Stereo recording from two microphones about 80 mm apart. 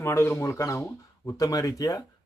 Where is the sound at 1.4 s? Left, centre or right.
Left.